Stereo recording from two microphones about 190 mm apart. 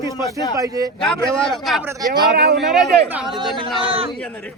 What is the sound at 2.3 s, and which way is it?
Speech, 60° right (ahead or behind).